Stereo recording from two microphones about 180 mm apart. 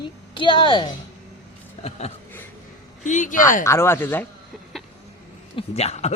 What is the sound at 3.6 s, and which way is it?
Speech, 15° left (ahead or behind).